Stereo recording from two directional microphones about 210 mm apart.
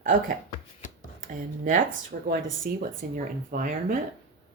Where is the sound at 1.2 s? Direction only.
40° right (ahead or behind).